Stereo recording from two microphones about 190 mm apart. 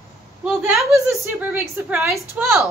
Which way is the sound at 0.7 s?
15° right (ahead or behind).